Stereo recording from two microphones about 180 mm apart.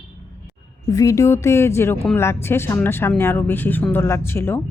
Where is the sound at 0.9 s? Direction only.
20° left (ahead or behind).